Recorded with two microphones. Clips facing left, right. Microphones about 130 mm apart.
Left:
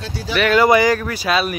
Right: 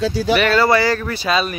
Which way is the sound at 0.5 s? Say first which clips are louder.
Left 7 dB; 15° left (ahead or behind).